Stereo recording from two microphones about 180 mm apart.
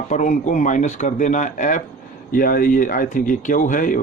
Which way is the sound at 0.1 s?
45° left (ahead or behind).